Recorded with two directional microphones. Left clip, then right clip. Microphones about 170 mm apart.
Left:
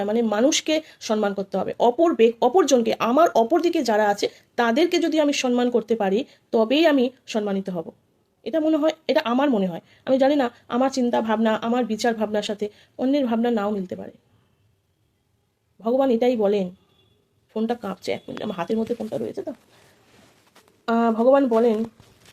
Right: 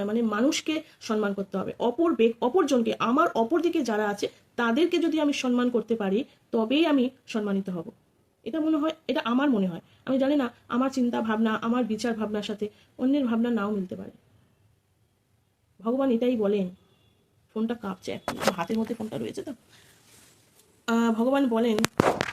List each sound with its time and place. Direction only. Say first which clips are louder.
0.0 s a woman's voice: left 6 dB; 5° right (ahead or behind)
15.8 s a woman's voice: left 6 dB; 5° right (ahead or behind); by 19.5 s 20° right (ahead or behind)
20.8 s speech: left 7 dB; 20° right (ahead or behind)